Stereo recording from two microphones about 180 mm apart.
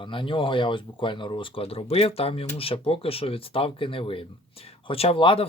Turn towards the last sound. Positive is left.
turn(degrees=30)  # may be behind; listen again after turning